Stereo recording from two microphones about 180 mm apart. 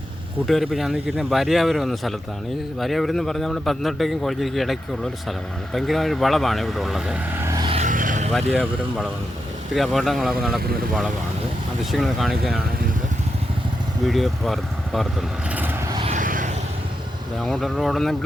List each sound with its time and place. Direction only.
0.4 s a man's voice: centre (ahead or behind); by 7.7 s 15° right (ahead or behind)
7.7 s a sound: 40° right (ahead or behind)
8.3 s a man's voice: centre (ahead or behind)
14.0 s a man's voice: centre (ahead or behind)
15.5 s vehicle: 10° right (ahead or behind)
16.1 s vehicle: 45° right (ahead or behind)
17.4 s a man's voice: centre (ahead or behind)